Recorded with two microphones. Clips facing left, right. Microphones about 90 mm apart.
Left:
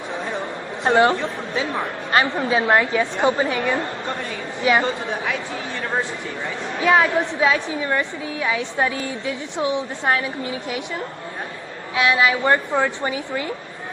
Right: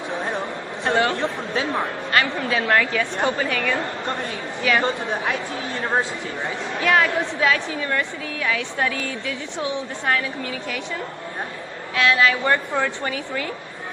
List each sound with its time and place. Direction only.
0.2 s a sound: 20° right (ahead or behind)
0.8 s a man's voice: 20° left (ahead or behind)
5.9 s speech: 20° right (ahead or behind)
6.8 s a woman's voice: 20° left (ahead or behind)
11.9 s a woman's voice: 20° left (ahead or behind)